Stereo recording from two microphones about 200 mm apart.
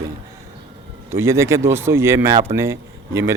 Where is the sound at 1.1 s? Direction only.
15° right (ahead or behind).